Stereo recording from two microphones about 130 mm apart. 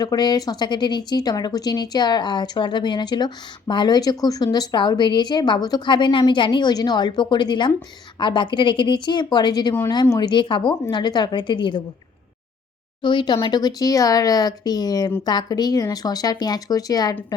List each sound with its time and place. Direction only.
0.0 s speech: 30° left (ahead or behind)
13.0 s speech: 35° left (ahead or behind)